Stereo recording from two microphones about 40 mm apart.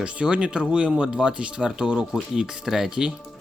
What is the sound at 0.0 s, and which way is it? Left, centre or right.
Speech, right.